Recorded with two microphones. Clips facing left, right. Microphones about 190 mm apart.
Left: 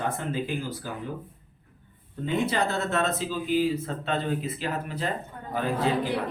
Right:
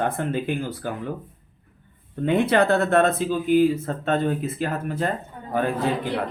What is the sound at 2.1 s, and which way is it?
Speech, 65° right (ahead or behind).